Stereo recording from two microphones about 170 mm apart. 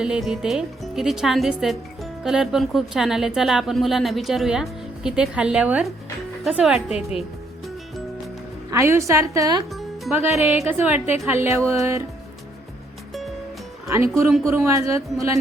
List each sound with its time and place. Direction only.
0.0 s speech: 5° right (ahead or behind)
8.7 s a woman's voice: 15° right (ahead or behind)
13.8 s a woman's voice: 15° right (ahead or behind)